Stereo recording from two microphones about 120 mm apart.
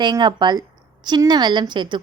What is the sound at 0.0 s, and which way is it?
A woman's voice, 40° right (ahead or behind).